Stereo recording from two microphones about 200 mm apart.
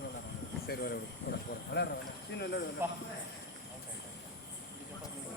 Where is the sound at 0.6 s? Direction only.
50° left (ahead or behind).